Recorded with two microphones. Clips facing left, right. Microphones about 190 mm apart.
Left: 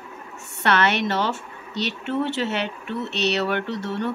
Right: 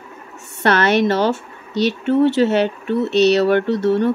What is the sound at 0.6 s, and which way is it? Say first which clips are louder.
Speech: right 6 dB; 40° right (ahead or behind).